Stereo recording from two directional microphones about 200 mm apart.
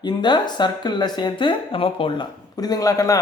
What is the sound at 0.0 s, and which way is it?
A man's voice, 20° left (ahead or behind).